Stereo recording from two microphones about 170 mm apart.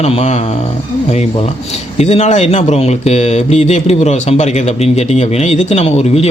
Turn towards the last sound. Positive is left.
turn(degrees=35)  # may be behind; listen again after turning